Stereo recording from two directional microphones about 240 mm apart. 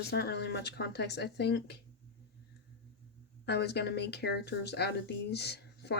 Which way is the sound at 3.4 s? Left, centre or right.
Left.